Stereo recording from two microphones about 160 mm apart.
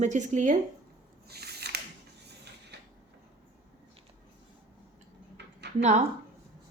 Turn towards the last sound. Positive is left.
turn(degrees=-45)  # may be behind; listen again after turning